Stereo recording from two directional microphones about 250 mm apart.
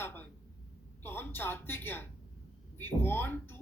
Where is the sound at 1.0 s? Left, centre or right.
Centre.